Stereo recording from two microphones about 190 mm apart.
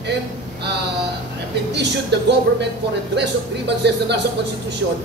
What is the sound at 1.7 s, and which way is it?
Speech, 65° right (ahead or behind).